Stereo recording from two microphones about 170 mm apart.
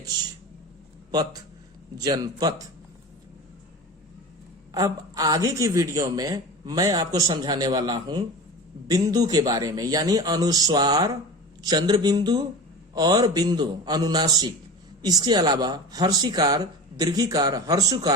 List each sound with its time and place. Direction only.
1.1 s a man's voice: 25° right (ahead or behind)
4.7 s a man's voice: 20° right (ahead or behind)